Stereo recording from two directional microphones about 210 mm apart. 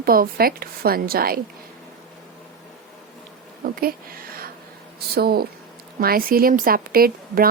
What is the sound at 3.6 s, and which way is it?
Speech, 45° right (ahead or behind).